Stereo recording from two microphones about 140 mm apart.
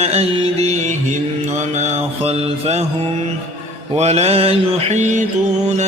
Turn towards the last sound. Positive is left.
turn(degrees=-60)  # may be behind; listen again after turning